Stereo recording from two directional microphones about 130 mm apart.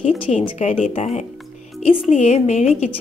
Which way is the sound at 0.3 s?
55° left (ahead or behind).